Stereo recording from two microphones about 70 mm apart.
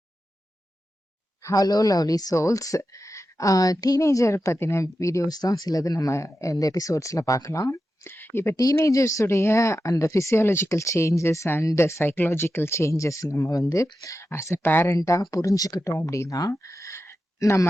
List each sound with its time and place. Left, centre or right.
1.4 s a sound: left
1.6 s speech: left
5.3 s speech: left
8.0 s speech: left
8.5 s speech: left
10.7 s speech: left
14.8 s speech: left
16.0 s speech: left